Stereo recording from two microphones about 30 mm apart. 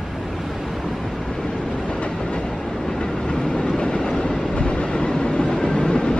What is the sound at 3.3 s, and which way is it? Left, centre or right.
Train, left.